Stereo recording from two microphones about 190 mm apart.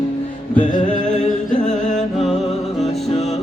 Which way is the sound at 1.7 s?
40° left (ahead or behind).